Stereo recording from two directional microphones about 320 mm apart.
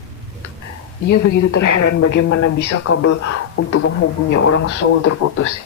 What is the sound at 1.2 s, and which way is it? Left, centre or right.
A woman's voice, left.